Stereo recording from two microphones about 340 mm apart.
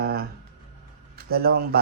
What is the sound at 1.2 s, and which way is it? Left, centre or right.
Speech, right.